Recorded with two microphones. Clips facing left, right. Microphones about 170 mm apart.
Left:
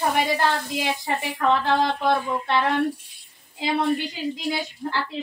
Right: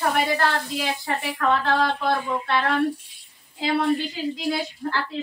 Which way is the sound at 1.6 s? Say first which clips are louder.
Left 1 dB; 20° left (ahead or behind).